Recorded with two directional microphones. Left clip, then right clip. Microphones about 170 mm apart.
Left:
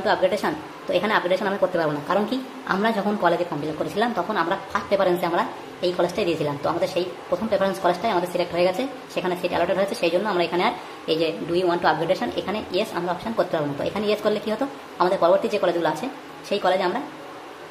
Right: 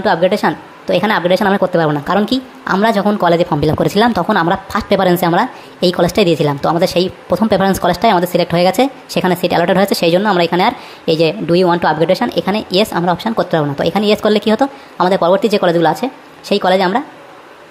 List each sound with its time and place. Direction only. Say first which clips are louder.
0.0 s a woman's voice: right 8 dB; 40° right (ahead or behind)